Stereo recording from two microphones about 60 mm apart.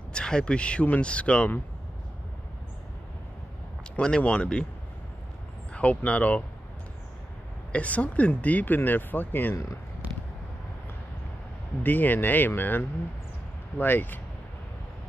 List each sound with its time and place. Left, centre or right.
0.1 s speech: centre
4.0 s speech: centre
5.7 s speech: left
7.7 s speech: left
11.8 s speech: left